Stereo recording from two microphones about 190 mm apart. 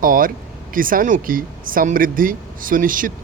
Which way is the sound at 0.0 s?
45° right (ahead or behind).